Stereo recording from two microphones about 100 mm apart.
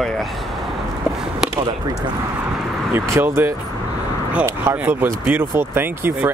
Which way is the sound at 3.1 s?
25° right (ahead or behind).